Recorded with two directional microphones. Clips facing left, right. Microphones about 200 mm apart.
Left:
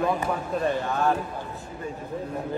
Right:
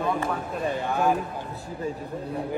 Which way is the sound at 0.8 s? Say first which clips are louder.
Right 1 dB; 10° right (ahead or behind).